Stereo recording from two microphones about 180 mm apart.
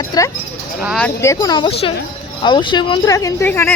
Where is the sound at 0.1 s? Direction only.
20° left (ahead or behind).